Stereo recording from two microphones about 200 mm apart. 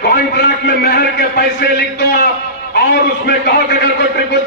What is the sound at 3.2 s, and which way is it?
Speech, 55° left (ahead or behind).